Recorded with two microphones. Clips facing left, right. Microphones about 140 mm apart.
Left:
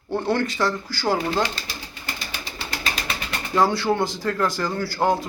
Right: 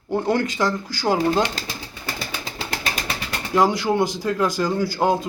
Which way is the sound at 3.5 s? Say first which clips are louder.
Right 1 dB; 15° right (ahead or behind).